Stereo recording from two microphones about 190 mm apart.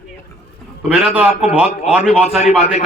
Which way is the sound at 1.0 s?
5° right (ahead or behind).